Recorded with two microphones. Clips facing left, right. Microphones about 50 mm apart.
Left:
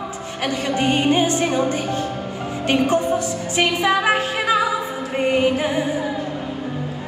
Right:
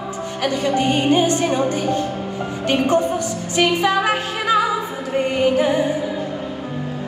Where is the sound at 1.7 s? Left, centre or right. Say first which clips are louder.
Right 2 dB; left.